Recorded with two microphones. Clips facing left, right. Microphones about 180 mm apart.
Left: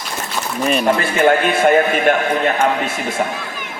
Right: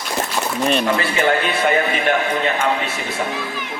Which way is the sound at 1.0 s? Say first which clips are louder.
Left 4 dB; 45° left (ahead or behind).